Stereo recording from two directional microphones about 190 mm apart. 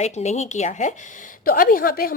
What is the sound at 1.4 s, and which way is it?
Speech, 50° left (ahead or behind).